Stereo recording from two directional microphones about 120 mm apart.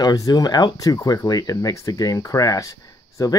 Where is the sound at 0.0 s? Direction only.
30° left (ahead or behind).